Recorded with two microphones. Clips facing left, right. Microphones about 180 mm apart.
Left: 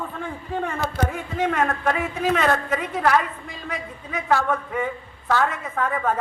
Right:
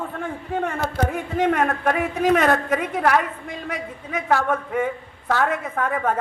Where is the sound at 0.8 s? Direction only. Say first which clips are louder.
Right 2 dB; 45° right (ahead or behind).